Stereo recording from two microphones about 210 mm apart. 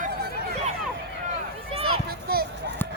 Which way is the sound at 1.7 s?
25° right (ahead or behind).